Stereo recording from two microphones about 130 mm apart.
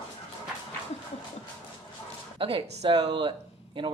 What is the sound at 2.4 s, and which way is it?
Speech, 45° right (ahead or behind).